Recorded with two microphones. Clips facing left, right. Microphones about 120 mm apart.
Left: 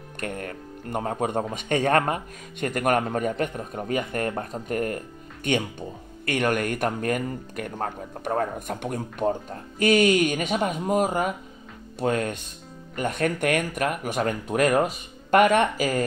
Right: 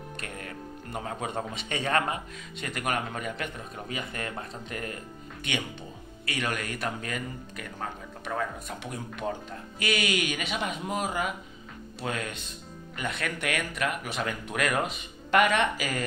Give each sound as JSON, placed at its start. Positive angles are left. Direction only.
{"t": 0.2, "sound": "speech", "side_deg": 50}